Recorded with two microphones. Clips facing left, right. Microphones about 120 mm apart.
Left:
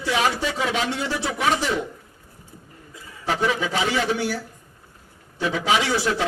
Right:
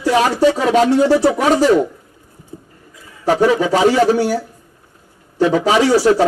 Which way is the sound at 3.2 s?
40° right (ahead or behind).